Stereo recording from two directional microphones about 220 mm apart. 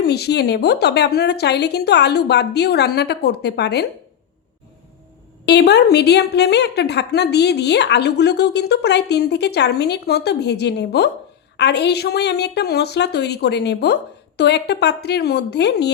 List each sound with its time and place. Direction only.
0.0 s a woman's voice: 45° left (ahead or behind)
5.5 s a woman's voice: 50° left (ahead or behind)